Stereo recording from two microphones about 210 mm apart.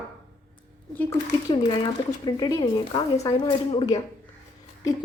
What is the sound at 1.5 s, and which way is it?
A woman's voice, 25° left (ahead or behind).